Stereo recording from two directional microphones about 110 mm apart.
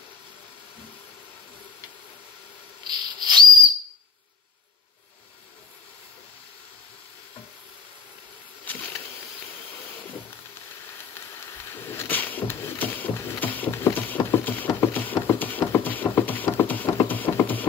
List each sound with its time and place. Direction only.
2.8 s rub: 40° right (ahead or behind)
8.7 s bee: 15° left (ahead or behind)
11.2 s a sound: 20° left (ahead or behind)